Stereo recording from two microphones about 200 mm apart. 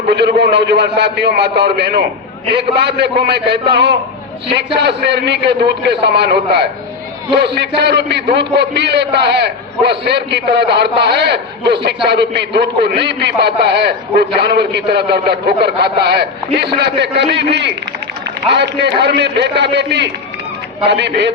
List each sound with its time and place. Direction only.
0.1 s a man's voice: 55° right (ahead or behind)